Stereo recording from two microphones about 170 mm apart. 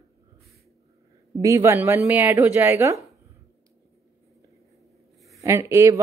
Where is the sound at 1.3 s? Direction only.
20° right (ahead or behind).